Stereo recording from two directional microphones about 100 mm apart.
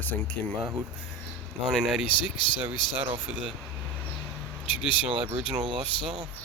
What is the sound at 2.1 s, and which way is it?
Speech, 55° left (ahead or behind).